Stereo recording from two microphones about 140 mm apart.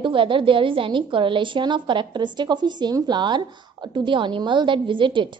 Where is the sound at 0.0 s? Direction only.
35° right (ahead or behind).